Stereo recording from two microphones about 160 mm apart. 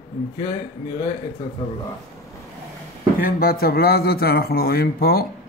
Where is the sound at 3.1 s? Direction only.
65° left (ahead or behind).